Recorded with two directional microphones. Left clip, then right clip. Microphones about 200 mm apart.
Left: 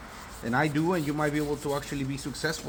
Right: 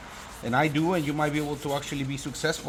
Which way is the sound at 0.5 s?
30° right (ahead or behind).